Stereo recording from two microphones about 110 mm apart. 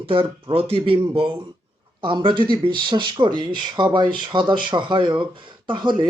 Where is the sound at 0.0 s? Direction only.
55° right (ahead or behind).